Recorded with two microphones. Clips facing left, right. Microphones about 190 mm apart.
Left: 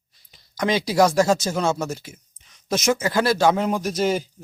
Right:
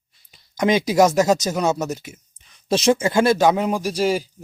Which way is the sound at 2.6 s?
30° right (ahead or behind).